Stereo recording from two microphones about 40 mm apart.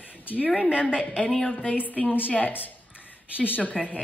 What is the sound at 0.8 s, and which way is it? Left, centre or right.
A woman's voice, left.